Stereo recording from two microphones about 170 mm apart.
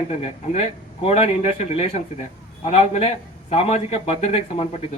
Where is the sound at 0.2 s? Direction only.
35° left (ahead or behind).